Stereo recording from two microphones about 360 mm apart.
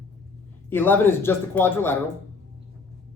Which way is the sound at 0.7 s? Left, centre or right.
Centre.